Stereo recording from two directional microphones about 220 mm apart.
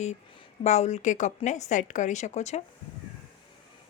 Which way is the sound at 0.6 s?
30° left (ahead or behind).